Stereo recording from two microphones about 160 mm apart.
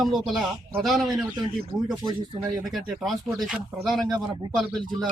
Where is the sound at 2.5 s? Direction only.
Centre (ahead or behind).